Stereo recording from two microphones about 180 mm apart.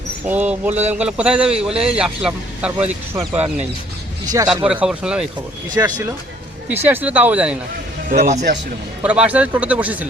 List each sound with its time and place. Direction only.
0.3 s speech: 10° right (ahead or behind)
0.7 s speech: 40° right (ahead or behind)
0.9 s speech: 5° right (ahead or behind)
4.6 s speech: 5° right (ahead or behind)
5.7 s speech: 20° right (ahead or behind)
6.7 s speech: 10° right (ahead or behind)
8.1 s speech: 40° right (ahead or behind)
9.0 s speech: 5° right (ahead or behind)